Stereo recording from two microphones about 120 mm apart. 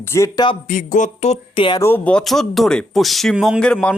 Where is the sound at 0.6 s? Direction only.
90° left.